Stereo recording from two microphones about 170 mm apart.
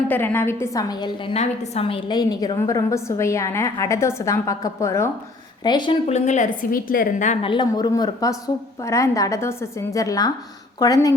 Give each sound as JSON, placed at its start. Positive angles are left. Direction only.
{"t": 0.1, "sound": "a woman's voice", "side_deg": 10}
{"t": 1.3, "sound": "a woman's voice", "side_deg": 40}
{"t": 6.1, "sound": "a woman's voice", "side_deg": 40}
{"t": 7.4, "sound": "a woman's voice", "side_deg": 25}